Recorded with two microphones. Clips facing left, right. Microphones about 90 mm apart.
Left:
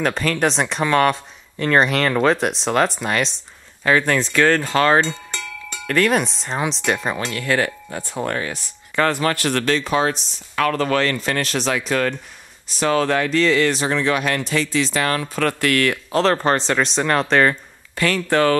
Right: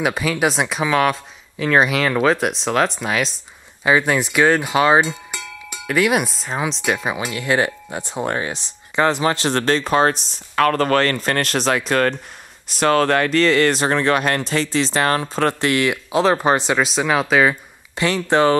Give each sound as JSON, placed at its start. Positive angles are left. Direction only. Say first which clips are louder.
{"t": 0.0, "sound": "speech", "louder": "even", "side_deg": -10}
{"t": 3.8, "sound": "speech", "louder": "right 1 dB", "side_deg": -15}
{"t": 12.6, "sound": "speech", "louder": "right 2 dB", "side_deg": -60}
{"t": 15.7, "sound": "speech", "louder": "even", "side_deg": -15}
{"t": 17.9, "sound": "speech", "louder": "right 1 dB", "side_deg": -20}